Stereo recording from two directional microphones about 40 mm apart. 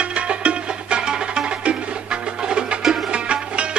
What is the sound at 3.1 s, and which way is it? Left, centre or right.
Music, right.